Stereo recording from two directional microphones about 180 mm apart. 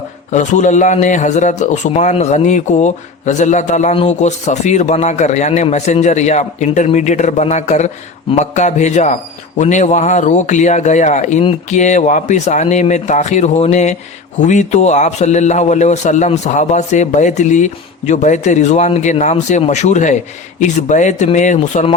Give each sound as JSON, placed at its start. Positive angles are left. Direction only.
{"t": 0.3, "sound": "a man's voice", "side_deg": 40}